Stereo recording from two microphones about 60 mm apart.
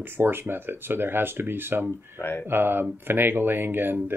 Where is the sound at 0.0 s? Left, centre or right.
Right.